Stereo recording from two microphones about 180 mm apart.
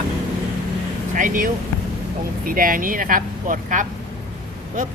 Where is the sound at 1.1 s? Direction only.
50° right (ahead or behind).